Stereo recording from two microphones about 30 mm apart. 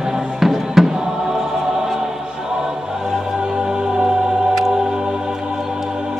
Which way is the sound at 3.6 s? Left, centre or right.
Right.